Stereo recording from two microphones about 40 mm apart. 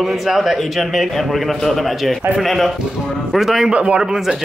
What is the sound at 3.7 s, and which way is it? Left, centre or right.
Speech, right.